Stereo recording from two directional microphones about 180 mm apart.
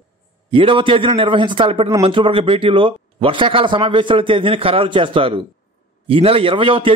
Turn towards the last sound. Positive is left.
turn(degrees=-30)  # may be behind; listen again after turning